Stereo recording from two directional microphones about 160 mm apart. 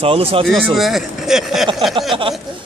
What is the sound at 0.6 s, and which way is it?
Speech, centre (ahead or behind).